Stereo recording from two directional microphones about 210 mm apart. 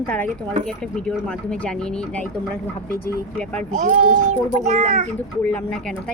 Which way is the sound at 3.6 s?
35° right (ahead or behind).